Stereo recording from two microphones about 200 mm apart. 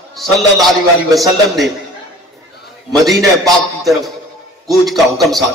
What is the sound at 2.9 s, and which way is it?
Speech, centre (ahead or behind).